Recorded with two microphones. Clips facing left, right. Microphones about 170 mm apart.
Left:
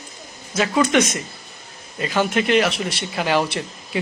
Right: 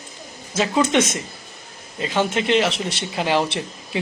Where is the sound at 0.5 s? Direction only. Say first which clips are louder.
Left 1 dB; 25° right (ahead or behind).